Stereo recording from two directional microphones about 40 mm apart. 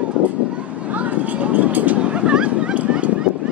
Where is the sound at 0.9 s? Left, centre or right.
Right.